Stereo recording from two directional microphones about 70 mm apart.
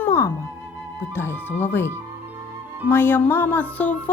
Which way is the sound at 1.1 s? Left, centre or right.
Left.